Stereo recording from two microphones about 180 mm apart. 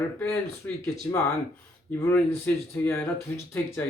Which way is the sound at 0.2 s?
10° left (ahead or behind).